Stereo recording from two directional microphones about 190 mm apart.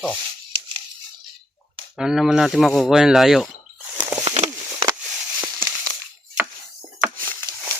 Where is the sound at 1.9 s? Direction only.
Centre (ahead or behind).